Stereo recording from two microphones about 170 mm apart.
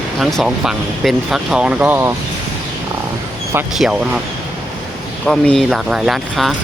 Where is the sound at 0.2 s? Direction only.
Centre (ahead or behind).